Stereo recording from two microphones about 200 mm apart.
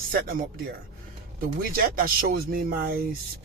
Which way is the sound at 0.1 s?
45° right (ahead or behind).